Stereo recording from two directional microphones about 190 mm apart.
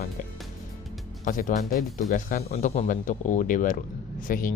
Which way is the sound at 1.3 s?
45° left (ahead or behind).